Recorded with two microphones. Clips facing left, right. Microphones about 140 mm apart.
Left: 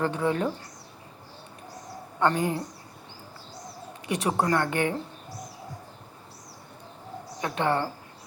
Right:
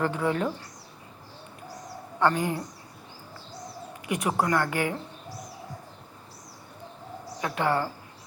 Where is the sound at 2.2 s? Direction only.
25° left (ahead or behind).